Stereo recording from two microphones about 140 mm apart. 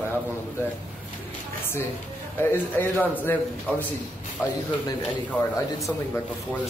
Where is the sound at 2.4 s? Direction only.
15° left (ahead or behind).